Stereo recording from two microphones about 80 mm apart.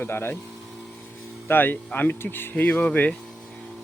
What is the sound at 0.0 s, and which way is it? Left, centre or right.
Speech, left.